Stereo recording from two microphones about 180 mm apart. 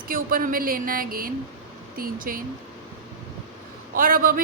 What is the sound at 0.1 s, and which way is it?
A woman's voice, 50° right (ahead or behind).